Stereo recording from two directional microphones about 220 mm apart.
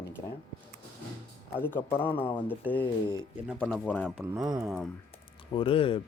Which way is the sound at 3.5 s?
Centre (ahead or behind).